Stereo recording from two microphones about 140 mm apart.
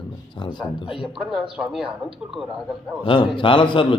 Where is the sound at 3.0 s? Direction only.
35° left (ahead or behind).